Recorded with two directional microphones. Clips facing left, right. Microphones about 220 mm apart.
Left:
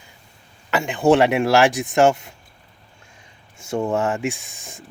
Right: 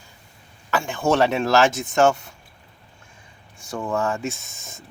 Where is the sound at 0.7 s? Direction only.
20° left (ahead or behind).